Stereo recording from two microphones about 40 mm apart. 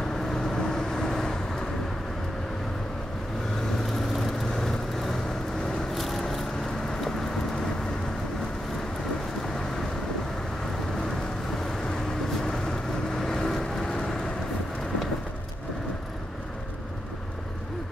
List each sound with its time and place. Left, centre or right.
0.3 s vehicle: centre
4.1 s vehicle: centre
5.9 s a sound: centre
6.3 s vehicle: centre
12.4 s vehicle: centre